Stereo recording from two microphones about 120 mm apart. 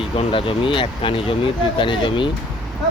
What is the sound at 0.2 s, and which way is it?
Speech, 50° left (ahead or behind).